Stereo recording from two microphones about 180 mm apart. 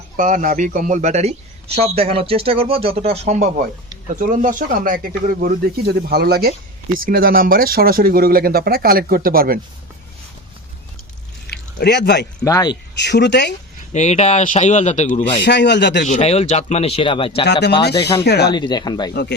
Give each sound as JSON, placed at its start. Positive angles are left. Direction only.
{"t": 0.2, "sound": "speech", "side_deg": -45}
{"t": 11.5, "sound": "speech", "side_deg": 65}
{"t": 12.5, "sound": "speech", "side_deg": 20}
{"t": 13.0, "sound": "a man's voice", "side_deg": 70}
{"t": 13.9, "sound": "speech", "side_deg": 40}
{"t": 15.4, "sound": "a man's voice", "side_deg": 70}
{"t": 16.0, "sound": "speech", "side_deg": 40}
{"t": 17.4, "sound": "a man's voice", "side_deg": 70}
{"t": 18.5, "sound": "speech", "side_deg": 25}